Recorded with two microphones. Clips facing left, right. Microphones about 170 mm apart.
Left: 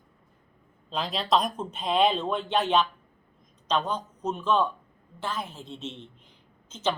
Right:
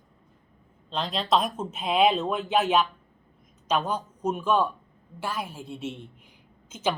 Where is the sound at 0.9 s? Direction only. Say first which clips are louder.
Right 1 dB; centre (ahead or behind).